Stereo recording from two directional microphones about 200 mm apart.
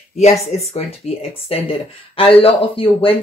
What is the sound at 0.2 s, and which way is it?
Speech, 30° left (ahead or behind).